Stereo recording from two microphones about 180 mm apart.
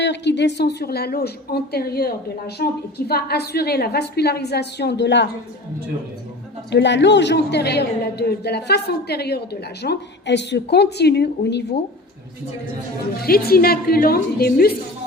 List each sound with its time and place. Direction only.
0.0 s a woman's voice: 75° left (ahead or behind)
6.7 s a woman's voice: 75° left (ahead or behind)
13.1 s a woman's voice: 60° left (ahead or behind)